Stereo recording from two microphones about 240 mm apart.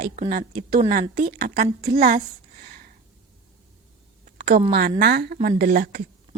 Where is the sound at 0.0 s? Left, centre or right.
Right.